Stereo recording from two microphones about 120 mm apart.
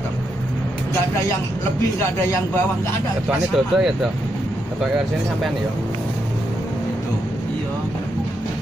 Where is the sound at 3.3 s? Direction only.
5° right (ahead or behind).